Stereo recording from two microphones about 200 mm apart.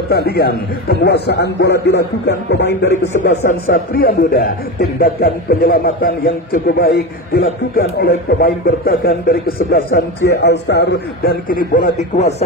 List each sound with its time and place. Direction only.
0.1 s a man's voice: 55° left (ahead or behind); by 12.4 s 35° left (ahead or behind)